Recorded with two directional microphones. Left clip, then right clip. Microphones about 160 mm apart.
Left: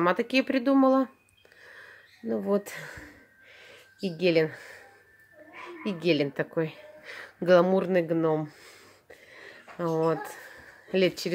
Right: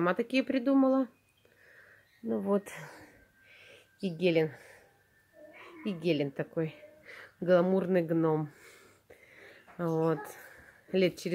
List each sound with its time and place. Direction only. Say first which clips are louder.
0.0 s speech: left 5 dB; 10° right (ahead or behind)
2.2 s speech: left 3 dB; 5° right (ahead or behind)
3.5 s a sound: left 4 dB; 15° right (ahead or behind)
5.9 s a woman's voice: left 5 dB; 5° right (ahead or behind)